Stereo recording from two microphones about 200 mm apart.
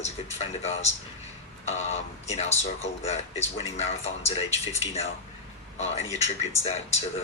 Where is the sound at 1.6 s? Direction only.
30° left (ahead or behind).